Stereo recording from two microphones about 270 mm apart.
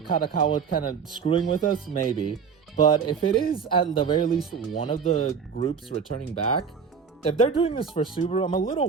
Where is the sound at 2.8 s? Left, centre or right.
Centre.